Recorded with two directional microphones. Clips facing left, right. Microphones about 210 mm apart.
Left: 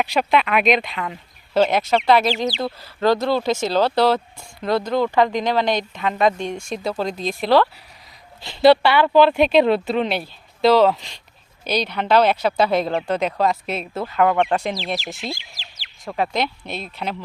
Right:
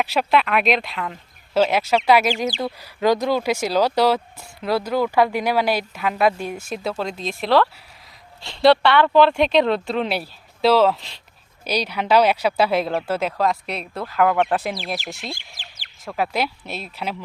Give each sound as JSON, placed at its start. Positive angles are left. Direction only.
{"t": 0.0, "sound": "speech", "side_deg": 0}
{"t": 15.4, "sound": "bird", "side_deg": -50}
{"t": 16.0, "sound": "speech", "side_deg": -5}